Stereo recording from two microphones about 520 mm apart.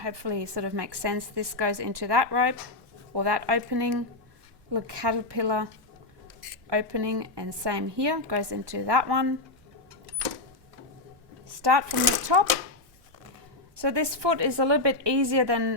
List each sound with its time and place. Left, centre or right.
0.0 s a woman's voice: right
6.7 s a woman's voice: right
11.6 s a woman's voice: right
13.7 s a woman's voice: right